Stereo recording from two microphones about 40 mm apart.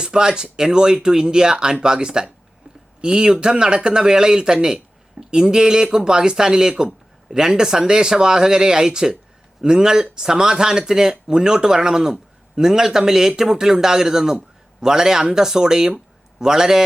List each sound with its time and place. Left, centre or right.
0.0 s speech: centre